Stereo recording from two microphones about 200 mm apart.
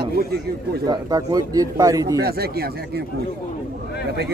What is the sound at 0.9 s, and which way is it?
Speech, 20° right (ahead or behind).